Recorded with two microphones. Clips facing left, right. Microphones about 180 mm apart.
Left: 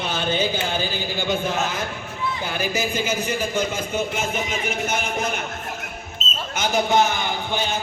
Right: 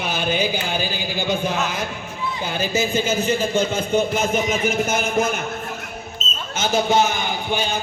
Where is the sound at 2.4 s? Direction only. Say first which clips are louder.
Right 5 dB; 20° right (ahead or behind).